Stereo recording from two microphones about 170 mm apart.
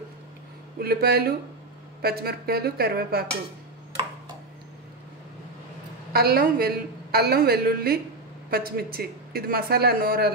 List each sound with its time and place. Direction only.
0.7 s a woman's voice: 65° right (ahead or behind)
6.1 s a woman's voice: 60° right (ahead or behind)